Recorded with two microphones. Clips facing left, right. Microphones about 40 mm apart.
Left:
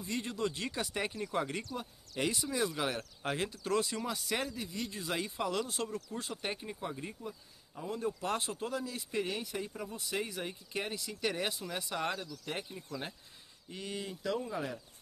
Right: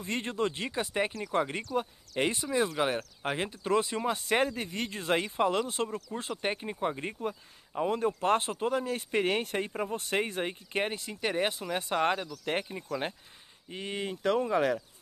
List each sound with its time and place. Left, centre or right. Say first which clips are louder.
0.0 s speech: right 5 dB; right
0.7 s speech: right 5 dB; right
1.8 s speech: right 10 dB; right
11.1 s speech: right 5 dB; right
13.7 s speech: right 5 dB; right